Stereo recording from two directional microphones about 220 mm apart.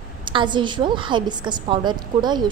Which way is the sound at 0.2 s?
20° right (ahead or behind).